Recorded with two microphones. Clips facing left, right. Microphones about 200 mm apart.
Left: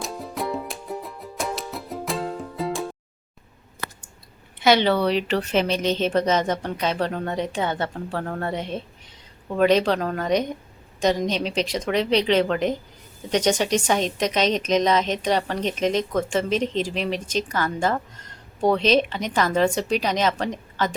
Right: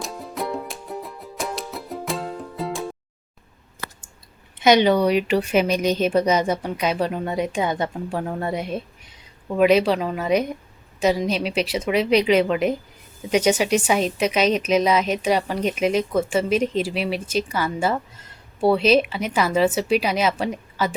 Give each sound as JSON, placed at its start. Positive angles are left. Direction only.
{"t": 0.0, "sound": "music", "side_deg": 0}
{"t": 4.6, "sound": "a woman's voice", "side_deg": -15}